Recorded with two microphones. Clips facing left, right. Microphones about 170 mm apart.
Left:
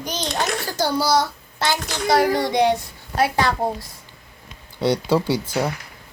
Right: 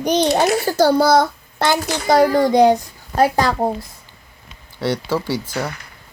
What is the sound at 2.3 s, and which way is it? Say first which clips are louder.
Child singing: right 6 dB; 40° right (ahead or behind).